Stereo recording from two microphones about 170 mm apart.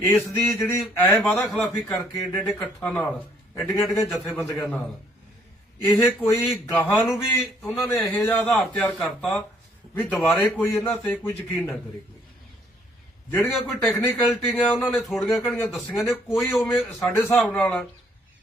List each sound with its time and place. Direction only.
0.1 s a man's voice: 5° left (ahead or behind)
0.7 s a man's voice: 15° left (ahead or behind)
1.1 s a man's voice: centre (ahead or behind)
6.0 s a man's voice: 15° left (ahead or behind)
11.5 s a man's voice: centre (ahead or behind)
13.3 s a man's voice: 10° left (ahead or behind)